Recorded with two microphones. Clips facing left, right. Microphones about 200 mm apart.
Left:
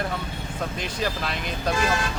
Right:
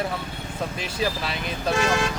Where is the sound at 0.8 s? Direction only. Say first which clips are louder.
Right 2 dB; 5° right (ahead or behind).